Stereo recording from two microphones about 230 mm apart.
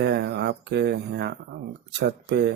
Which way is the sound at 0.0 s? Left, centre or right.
Right.